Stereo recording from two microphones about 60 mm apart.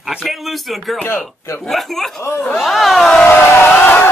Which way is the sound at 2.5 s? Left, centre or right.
Centre.